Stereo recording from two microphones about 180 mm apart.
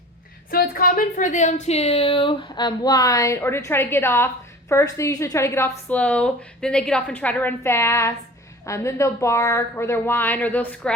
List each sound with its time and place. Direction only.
0.5 s a woman's voice: 55° left (ahead or behind); by 10.9 s 10° left (ahead or behind)